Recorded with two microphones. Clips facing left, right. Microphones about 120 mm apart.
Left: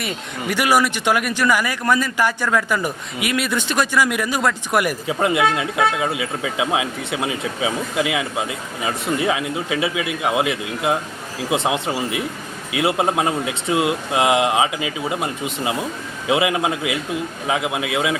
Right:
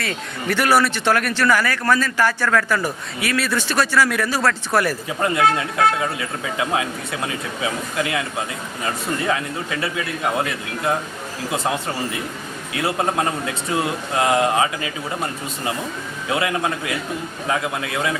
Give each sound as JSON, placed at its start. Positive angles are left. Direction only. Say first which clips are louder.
{"t": 0.0, "sound": "speech", "louder": "even", "side_deg": 15}